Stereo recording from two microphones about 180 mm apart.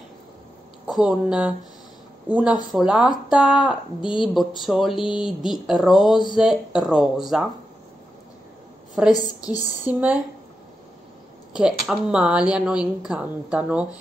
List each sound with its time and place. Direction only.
0.8 s speech: 5° right (ahead or behind)
9.0 s speech: 5° right (ahead or behind)
9.4 s speech: 20° left (ahead or behind)
9.8 s speech: 10° right (ahead or behind)
11.5 s speech: 5° right (ahead or behind)